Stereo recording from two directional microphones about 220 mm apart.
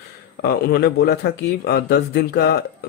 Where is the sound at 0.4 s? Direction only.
45° left (ahead or behind).